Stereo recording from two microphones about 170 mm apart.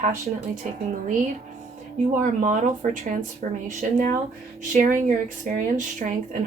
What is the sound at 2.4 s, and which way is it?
Speech, 45° right (ahead or behind).